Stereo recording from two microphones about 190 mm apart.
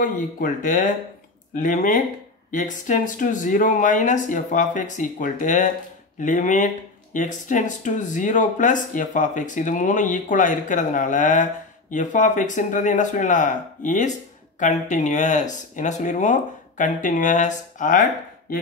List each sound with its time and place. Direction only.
0.0 s speech: 45° left (ahead or behind)